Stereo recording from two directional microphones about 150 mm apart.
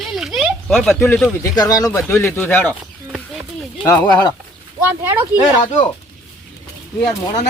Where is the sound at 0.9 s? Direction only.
15° left (ahead or behind).